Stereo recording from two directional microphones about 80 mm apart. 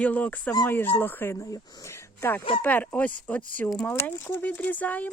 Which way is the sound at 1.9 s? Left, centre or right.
Left.